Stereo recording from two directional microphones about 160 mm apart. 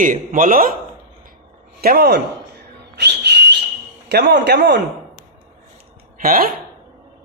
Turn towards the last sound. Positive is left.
turn(degrees=-65)  # may be behind; listen again after turning